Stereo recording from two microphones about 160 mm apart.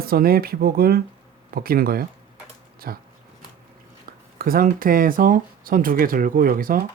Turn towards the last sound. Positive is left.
turn(degrees=-60)  # may be behind; listen again after turning